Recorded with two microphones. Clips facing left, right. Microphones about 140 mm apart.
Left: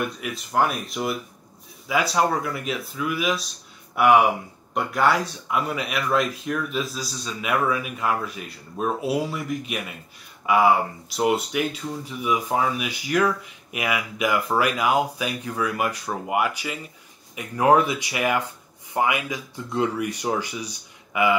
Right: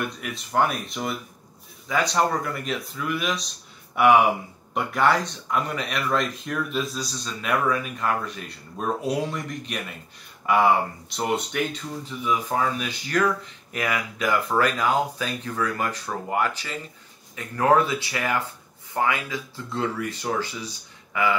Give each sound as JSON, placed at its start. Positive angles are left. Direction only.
{"t": 0.2, "sound": "speech", "side_deg": 0}